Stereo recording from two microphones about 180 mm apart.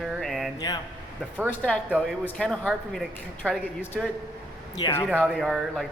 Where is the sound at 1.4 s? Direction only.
10° left (ahead or behind).